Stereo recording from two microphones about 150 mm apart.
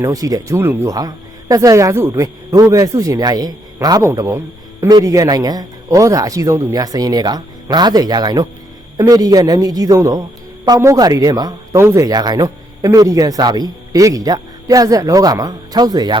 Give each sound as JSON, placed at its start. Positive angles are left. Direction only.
{"t": 0.0, "sound": "speech", "side_deg": -25}